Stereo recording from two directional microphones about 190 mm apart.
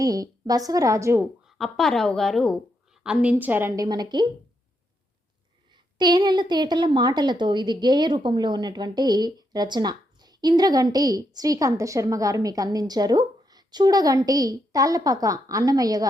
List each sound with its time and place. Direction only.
0.0 s a woman's voice: 20° right (ahead or behind)
1.5 s a woman's voice: centre (ahead or behind); by 4.3 s 20° right (ahead or behind)
5.7 s a woman's voice: 20° right (ahead or behind)